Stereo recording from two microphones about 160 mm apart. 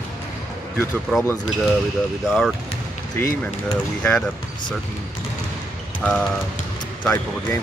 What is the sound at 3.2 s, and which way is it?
Speech, 15° left (ahead or behind).